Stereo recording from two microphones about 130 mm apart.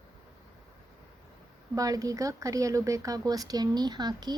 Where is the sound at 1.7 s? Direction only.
25° right (ahead or behind).